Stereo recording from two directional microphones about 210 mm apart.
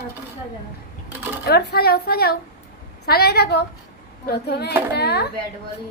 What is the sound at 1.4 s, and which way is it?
A woman's voice, 50° left (ahead or behind).